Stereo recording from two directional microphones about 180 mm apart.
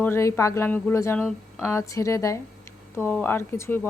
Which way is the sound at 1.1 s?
Centre (ahead or behind).